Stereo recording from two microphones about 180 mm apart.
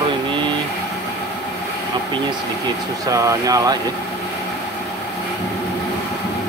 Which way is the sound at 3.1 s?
20° right (ahead or behind).